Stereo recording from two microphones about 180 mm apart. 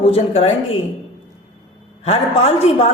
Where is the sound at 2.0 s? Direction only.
35° left (ahead or behind).